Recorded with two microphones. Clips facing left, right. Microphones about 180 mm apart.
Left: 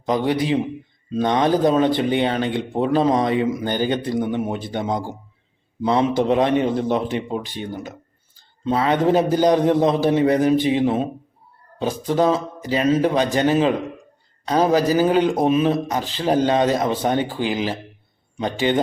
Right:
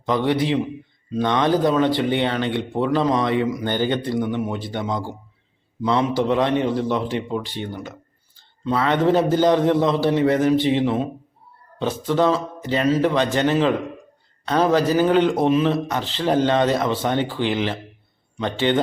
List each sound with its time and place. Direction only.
0.0 s a man's voice: 20° left (ahead or behind)
12.1 s a man's voice: 15° left (ahead or behind)